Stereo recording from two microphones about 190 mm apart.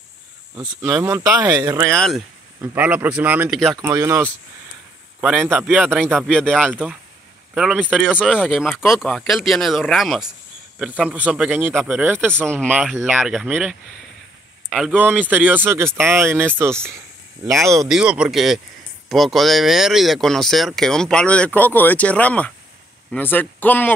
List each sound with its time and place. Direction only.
0.6 s speech: 15° right (ahead or behind)
1.9 s speech: centre (ahead or behind)
2.6 s speech: 10° right (ahead or behind)
3.8 s speech: 15° right (ahead or behind)
5.2 s speech: centre (ahead or behind); by 17.8 s 15° right (ahead or behind)
17.8 s speech: 5° right (ahead or behind)